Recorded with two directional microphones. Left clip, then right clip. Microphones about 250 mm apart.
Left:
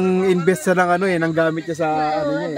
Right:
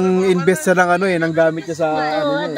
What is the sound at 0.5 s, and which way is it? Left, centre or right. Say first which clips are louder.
Speech: right 3 dB; centre.